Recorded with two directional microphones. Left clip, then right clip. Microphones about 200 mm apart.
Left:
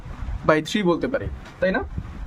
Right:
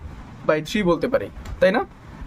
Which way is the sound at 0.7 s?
5° right (ahead or behind).